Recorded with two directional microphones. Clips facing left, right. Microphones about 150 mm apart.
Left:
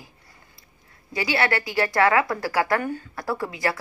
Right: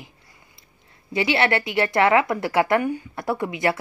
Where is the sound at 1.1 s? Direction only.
25° right (ahead or behind).